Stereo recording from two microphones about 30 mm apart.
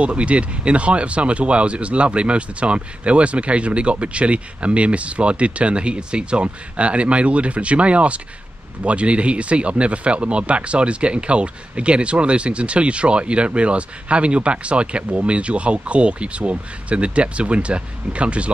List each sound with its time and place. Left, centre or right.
0.0 s speech: right
6.4 s speech: right